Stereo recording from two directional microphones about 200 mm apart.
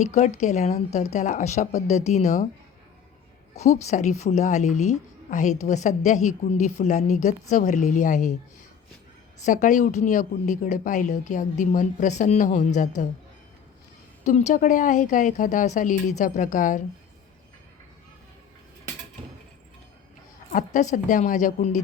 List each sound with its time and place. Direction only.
0.0 s speech: 35° left (ahead or behind)
3.5 s speech: 35° left (ahead or behind)
9.5 s speech: 40° left (ahead or behind)
14.3 s speech: 35° left (ahead or behind)
20.5 s speech: 40° left (ahead or behind)